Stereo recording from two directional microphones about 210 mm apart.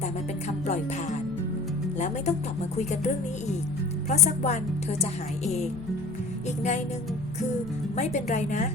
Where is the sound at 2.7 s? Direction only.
35° left (ahead or behind).